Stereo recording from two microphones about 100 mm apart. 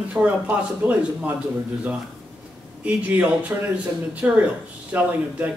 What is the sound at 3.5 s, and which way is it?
Speech, 20° right (ahead or behind).